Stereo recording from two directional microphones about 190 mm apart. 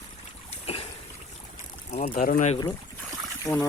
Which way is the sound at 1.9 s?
40° left (ahead or behind).